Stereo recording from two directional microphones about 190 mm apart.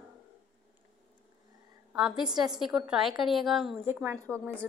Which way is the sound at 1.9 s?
Centre (ahead or behind).